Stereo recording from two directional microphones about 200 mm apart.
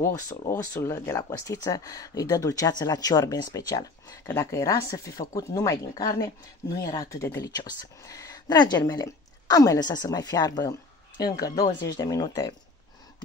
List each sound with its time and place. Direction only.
0.0 s speech: 15° left (ahead or behind)